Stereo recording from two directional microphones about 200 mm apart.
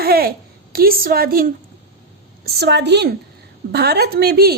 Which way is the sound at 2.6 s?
55° right (ahead or behind).